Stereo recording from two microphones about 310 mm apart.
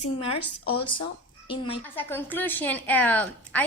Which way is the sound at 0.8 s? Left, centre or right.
Centre.